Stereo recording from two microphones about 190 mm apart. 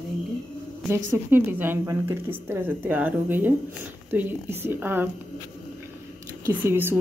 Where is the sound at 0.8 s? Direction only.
15° right (ahead or behind).